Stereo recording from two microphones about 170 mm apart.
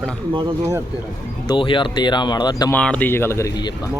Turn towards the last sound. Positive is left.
turn(degrees=20)  # may be behind; listen again after turning